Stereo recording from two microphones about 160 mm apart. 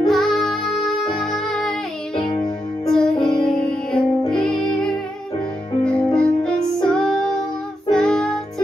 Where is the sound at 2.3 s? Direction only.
25° left (ahead or behind).